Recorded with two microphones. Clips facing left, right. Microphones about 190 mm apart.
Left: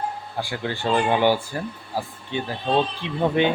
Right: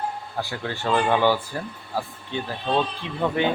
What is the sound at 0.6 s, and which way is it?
Speech, 25° left (ahead or behind).